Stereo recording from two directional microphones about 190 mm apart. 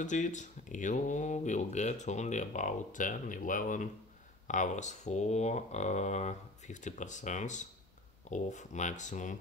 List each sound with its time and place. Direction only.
0.0 s speech: 40° left (ahead or behind)